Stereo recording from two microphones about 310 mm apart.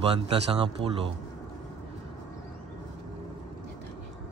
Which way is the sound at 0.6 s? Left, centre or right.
Centre.